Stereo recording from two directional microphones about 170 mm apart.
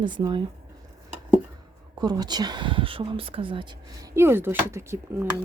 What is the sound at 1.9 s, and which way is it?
Speech, 25° right (ahead or behind).